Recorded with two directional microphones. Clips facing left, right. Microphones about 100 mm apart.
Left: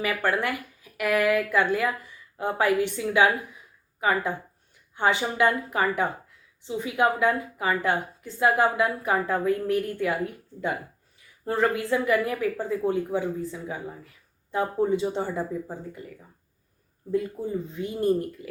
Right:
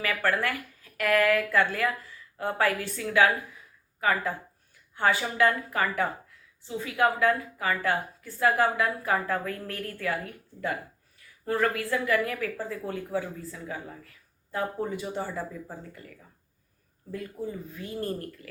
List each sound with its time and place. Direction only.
0.0 s speech: 20° left (ahead or behind)